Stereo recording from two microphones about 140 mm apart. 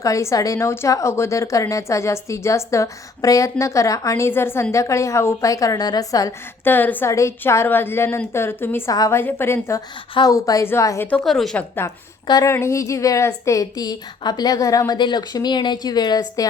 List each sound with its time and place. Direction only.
0.0 s a woman's voice: 20° left (ahead or behind)
6.7 s a woman's voice: 15° left (ahead or behind)
11.1 s a woman's voice: centre (ahead or behind)
11.8 s a woman's voice: 20° left (ahead or behind)